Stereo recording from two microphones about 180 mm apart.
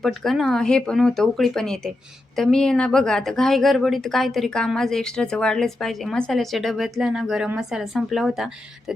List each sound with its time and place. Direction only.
0.0 s a woman's voice: centre (ahead or behind)